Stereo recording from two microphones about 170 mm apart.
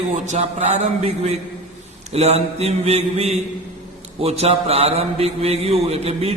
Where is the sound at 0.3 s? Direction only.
40° right (ahead or behind).